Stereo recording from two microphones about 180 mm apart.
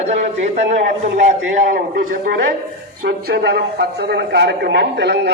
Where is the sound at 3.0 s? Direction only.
65° right (ahead or behind).